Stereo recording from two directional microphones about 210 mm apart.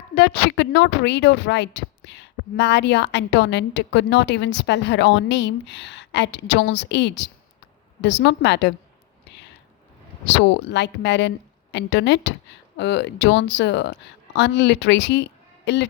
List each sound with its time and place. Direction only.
0.1 s a woman's voice: 55° left (ahead or behind)
10.2 s a woman's voice: 55° left (ahead or behind)